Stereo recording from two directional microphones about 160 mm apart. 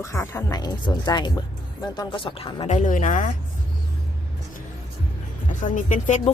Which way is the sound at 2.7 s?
50° left (ahead or behind).